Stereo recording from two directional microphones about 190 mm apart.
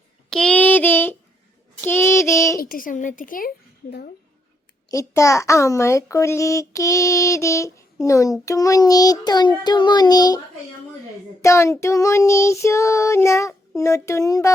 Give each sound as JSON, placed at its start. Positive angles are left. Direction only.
{"t": 0.3, "sound": "child singing", "side_deg": 5}
{"t": 1.8, "sound": "a child's voice", "side_deg": 10}
{"t": 2.6, "sound": "a woman's voice", "side_deg": 50}
{"t": 4.9, "sound": "a child's voice", "side_deg": 15}
{"t": 11.4, "sound": "a child's voice", "side_deg": 15}